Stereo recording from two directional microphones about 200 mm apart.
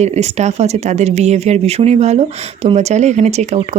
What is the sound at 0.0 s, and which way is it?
Speech, 35° right (ahead or behind).